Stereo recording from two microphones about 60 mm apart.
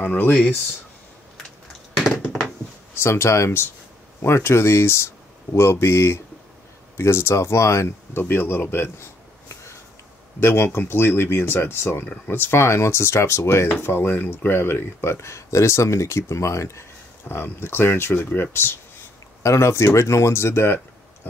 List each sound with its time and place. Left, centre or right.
0.0 s speech: left
3.0 s speech: left
10.4 s speech: left
13.7 s speech: left
15.1 s speech: left
17.3 s speech: left
19.4 s speech: left